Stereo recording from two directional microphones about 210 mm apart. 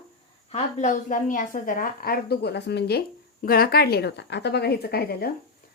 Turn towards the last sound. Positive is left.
turn(degrees=45)  # may be behind; listen again after turning